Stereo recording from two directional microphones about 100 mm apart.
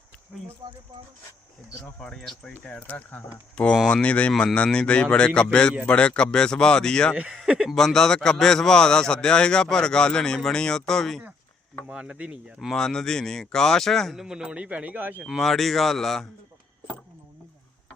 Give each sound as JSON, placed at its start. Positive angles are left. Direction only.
{"t": 0.6, "sound": "speech", "side_deg": -45}
{"t": 1.8, "sound": "a man's voice", "side_deg": 5}
{"t": 7.3, "sound": "speech", "side_deg": -5}
{"t": 7.8, "sound": "a man's voice", "side_deg": 5}
{"t": 11.9, "sound": "speech", "side_deg": -10}
{"t": 12.5, "sound": "speech", "side_deg": 5}
{"t": 15.2, "sound": "speech", "side_deg": 0}